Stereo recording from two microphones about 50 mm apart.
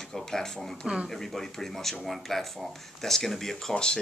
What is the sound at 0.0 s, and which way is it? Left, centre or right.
Speech, centre.